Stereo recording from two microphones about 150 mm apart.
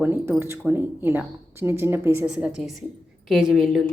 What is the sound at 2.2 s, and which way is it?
Speech, 5° right (ahead or behind).